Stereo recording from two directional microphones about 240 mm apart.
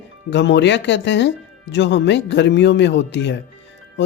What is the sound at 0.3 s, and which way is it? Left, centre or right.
Speech, left.